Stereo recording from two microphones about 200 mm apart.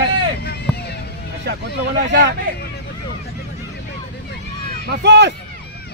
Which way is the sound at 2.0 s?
60° right (ahead or behind).